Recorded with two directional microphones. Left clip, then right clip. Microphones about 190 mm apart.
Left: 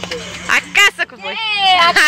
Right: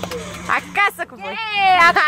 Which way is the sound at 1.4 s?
5° left (ahead or behind).